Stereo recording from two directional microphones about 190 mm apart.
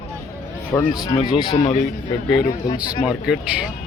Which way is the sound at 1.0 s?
20° left (ahead or behind).